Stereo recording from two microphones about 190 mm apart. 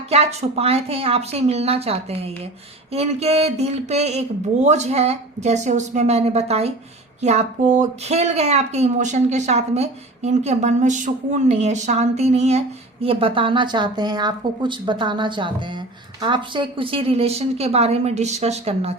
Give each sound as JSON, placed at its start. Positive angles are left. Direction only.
{"t": 0.1, "sound": "a woman's voice", "side_deg": -35}